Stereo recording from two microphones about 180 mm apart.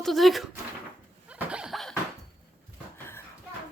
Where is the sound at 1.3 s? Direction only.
5° right (ahead or behind).